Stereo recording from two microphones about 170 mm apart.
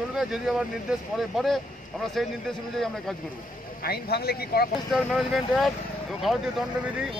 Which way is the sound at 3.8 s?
65° left (ahead or behind).